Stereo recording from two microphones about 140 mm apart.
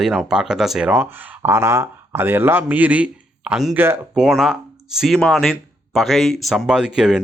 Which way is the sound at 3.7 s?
15° right (ahead or behind).